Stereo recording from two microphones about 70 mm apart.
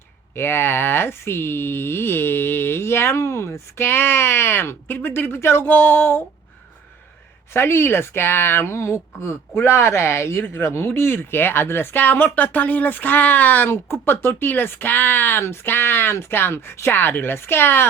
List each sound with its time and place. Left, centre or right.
0.3 s speech: left
7.5 s speech: left